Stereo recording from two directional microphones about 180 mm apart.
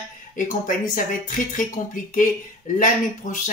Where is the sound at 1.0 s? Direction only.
45° left (ahead or behind).